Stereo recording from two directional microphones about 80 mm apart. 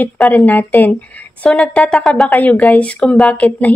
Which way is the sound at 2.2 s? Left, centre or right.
Centre.